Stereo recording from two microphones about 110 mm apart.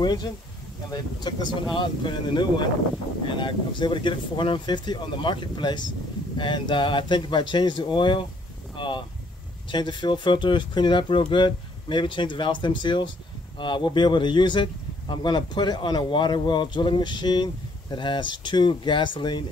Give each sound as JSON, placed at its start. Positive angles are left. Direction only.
{"t": 0.0, "sound": "speech", "side_deg": 40}